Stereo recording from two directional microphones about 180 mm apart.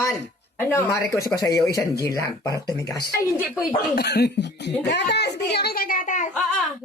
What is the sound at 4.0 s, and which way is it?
A child's voice, 65° left (ahead or behind).